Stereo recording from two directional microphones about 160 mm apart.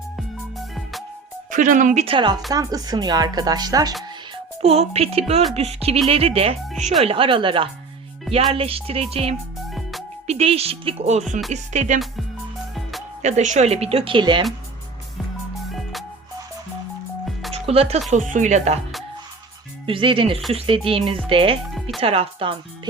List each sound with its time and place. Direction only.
1.5 s speech: 55° right (ahead or behind)
2.0 s speech: 30° right (ahead or behind)
4.6 s speech: 40° right (ahead or behind)
9.6 s music: centre (ahead or behind)
10.2 s speech: 40° right (ahead or behind)
13.2 s speech: 45° right (ahead or behind); by 14.4 s 30° right (ahead or behind)
15.7 s music: centre (ahead or behind)
17.5 s music: 40° right (ahead or behind)
18.1 s speech: 50° right (ahead or behind)
19.8 s speech: 30° right (ahead or behind)
21.8 s music: centre (ahead or behind)
22.0 s speech: 35° right (ahead or behind)